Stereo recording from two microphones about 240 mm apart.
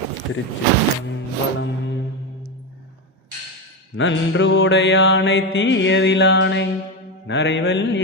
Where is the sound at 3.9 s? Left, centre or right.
Left.